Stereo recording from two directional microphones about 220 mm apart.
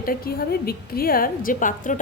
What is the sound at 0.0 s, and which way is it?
A woman's voice, 40° left (ahead or behind).